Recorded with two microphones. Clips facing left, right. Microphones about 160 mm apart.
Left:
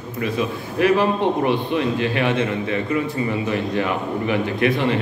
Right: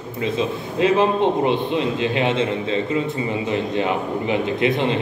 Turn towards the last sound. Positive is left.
turn(degrees=-20)  # may be behind; listen again after turning